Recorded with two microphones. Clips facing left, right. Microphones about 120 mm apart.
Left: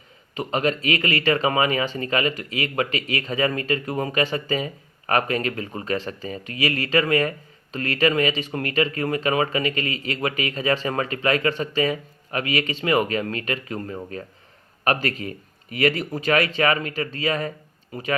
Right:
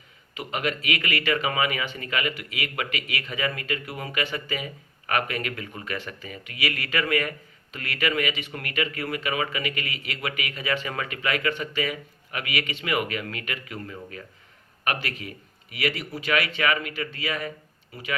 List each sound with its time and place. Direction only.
0.3 s speech: 35° left (ahead or behind)